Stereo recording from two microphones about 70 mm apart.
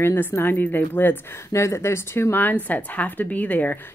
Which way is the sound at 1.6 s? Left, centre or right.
Left.